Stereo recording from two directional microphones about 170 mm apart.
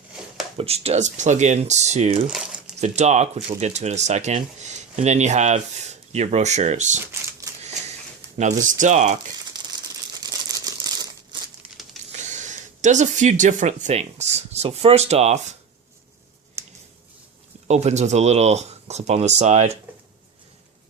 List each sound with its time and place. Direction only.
0.5 s speech: 35° right (ahead or behind)
8.4 s speech: 45° right (ahead or behind)
10.2 s crumpling: 20° right (ahead or behind)
12.1 s speech: 45° right (ahead or behind)
17.7 s speech: 40° right (ahead or behind)